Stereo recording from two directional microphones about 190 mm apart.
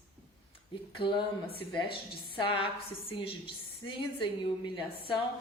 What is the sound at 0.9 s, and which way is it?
A woman's voice, 25° left (ahead or behind).